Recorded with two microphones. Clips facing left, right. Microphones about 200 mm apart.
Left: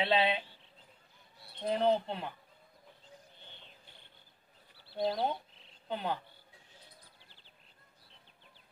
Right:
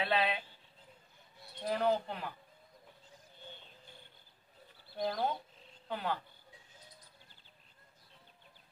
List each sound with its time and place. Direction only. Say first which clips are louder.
0.0 s speech: left 3 dB; 25° left (ahead or behind)
1.6 s speech: left 3 dB; 25° left (ahead or behind)
4.9 s speech: left 2 dB; 25° left (ahead or behind)